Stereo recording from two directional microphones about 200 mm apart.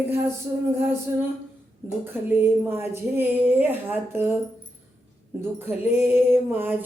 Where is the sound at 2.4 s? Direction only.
10° right (ahead or behind).